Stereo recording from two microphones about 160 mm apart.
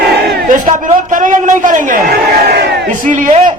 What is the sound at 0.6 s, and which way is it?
A man's voice, 55° right (ahead or behind).